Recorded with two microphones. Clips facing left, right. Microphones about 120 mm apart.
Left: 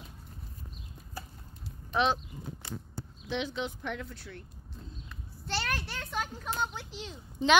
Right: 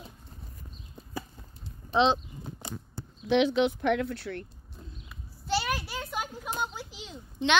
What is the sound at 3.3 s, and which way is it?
Speech, 70° right (ahead or behind).